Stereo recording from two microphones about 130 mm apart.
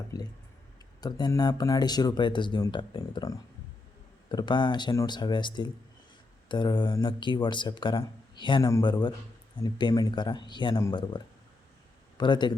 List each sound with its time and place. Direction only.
0.1 s speech: 30° left (ahead or behind)